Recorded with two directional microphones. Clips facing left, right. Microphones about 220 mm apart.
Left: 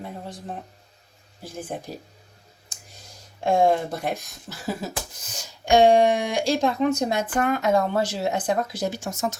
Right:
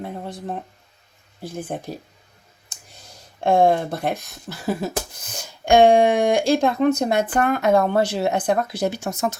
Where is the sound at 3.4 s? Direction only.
60° right (ahead or behind).